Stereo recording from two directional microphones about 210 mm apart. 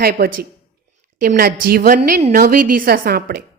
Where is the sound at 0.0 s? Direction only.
45° right (ahead or behind).